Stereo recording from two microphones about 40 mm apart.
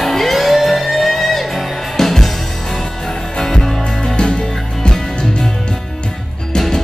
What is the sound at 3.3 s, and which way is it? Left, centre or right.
Music, centre.